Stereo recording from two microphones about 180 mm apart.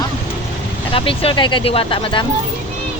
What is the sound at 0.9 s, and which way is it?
Speech, 30° left (ahead or behind).